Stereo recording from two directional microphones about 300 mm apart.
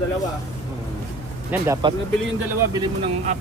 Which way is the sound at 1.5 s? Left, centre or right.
Centre.